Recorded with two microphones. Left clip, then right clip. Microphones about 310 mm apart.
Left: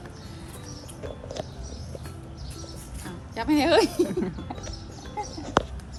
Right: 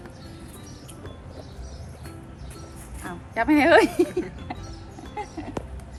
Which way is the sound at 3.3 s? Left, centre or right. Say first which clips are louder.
Right 4 dB; centre.